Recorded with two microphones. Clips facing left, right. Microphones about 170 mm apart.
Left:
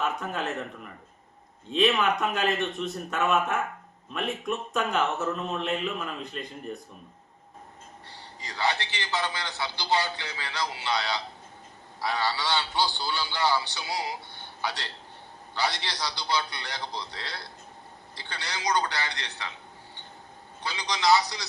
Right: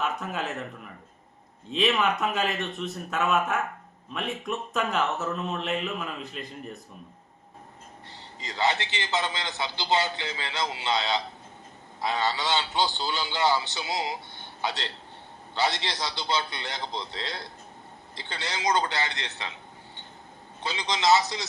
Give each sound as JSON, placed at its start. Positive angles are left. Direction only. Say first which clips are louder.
{"t": 0.0, "sound": "speech", "louder": "even", "side_deg": 0}
{"t": 1.7, "sound": "speech", "louder": "left 1 dB", "side_deg": 0}
{"t": 8.4, "sound": "a man's voice", "louder": "right 2 dB", "side_deg": -20}
{"t": 20.7, "sound": "a man's voice", "louder": "right 1 dB", "side_deg": -25}